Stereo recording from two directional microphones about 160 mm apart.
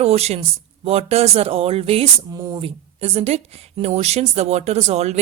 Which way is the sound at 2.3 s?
25° right (ahead or behind).